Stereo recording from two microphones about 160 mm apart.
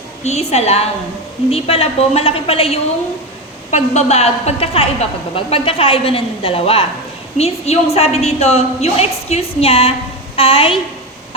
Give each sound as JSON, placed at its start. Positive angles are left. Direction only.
{"t": 0.3, "sound": "a woman's voice", "side_deg": 45}